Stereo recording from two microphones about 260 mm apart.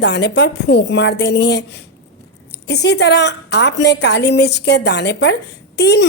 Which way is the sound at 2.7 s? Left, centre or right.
Left.